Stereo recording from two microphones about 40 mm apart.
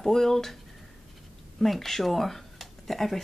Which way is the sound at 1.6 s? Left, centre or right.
Centre.